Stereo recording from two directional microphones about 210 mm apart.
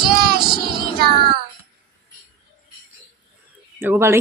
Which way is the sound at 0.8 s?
50° right (ahead or behind).